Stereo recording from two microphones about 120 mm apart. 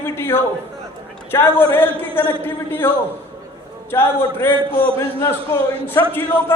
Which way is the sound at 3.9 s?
20° left (ahead or behind).